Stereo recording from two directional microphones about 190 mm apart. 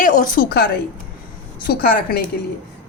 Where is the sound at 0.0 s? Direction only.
45° left (ahead or behind).